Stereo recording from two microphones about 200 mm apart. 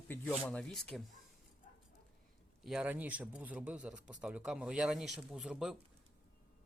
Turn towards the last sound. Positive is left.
turn(degrees=0)  # may be behind; listen again after turning